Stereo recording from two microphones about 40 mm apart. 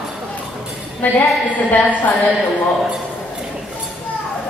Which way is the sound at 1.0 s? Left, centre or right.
Left.